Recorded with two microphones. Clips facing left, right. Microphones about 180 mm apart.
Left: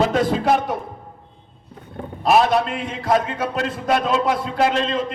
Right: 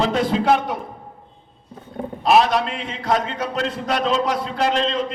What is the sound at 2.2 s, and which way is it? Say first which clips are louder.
A man's voice: even; 50° left (ahead or behind).